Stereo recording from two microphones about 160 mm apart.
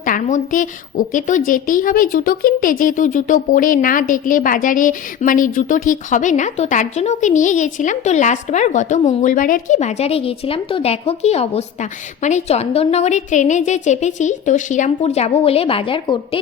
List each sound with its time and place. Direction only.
0.0 s a woman's voice: 55° left (ahead or behind); by 16.4 s 35° left (ahead or behind)